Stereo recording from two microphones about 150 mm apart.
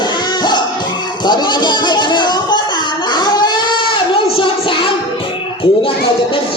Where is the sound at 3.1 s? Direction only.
30° left (ahead or behind).